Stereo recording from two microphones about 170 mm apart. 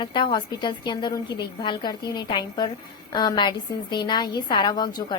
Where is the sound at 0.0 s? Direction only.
30° left (ahead or behind).